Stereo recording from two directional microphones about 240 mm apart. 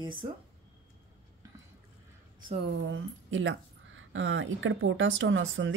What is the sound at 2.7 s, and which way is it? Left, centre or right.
Speech, right.